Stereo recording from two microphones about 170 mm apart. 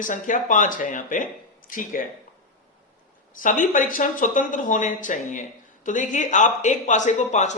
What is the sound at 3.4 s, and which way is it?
Speech, 50° left (ahead or behind).